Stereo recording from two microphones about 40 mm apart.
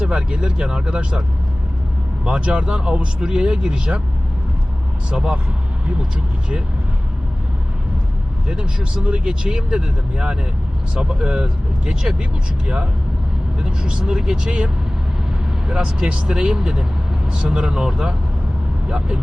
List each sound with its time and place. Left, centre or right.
0.1 s speech: right
2.2 s speech: right
5.1 s speech: centre
8.4 s speech: right
16.0 s speech: right